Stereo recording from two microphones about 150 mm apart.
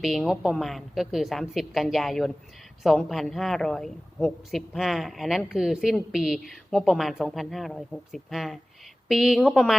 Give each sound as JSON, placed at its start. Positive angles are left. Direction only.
{"t": 0.0, "sound": "a woman's voice", "side_deg": 0}